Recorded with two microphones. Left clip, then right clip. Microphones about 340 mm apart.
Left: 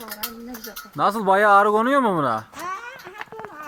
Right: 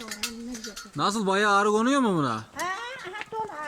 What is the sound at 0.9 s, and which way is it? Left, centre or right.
Speech, centre.